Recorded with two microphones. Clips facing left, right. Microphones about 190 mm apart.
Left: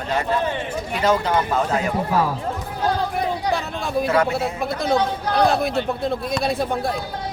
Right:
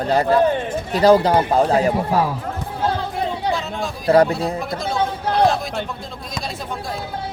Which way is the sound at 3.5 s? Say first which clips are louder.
Right 1 dB; 30° right (ahead or behind).